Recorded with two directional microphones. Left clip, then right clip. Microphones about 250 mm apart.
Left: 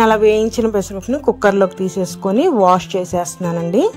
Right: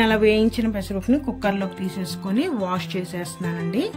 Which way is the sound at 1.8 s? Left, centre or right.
Centre.